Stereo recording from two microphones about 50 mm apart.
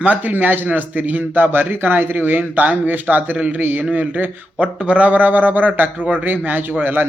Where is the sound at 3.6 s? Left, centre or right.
Right.